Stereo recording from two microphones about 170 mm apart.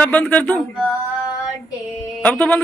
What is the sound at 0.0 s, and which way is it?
Speech, 10° left (ahead or behind).